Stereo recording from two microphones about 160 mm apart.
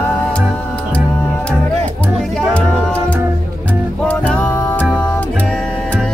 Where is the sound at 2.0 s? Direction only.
5° left (ahead or behind).